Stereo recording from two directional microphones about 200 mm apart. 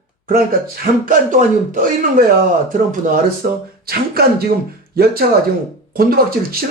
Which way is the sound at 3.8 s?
50° right (ahead or behind).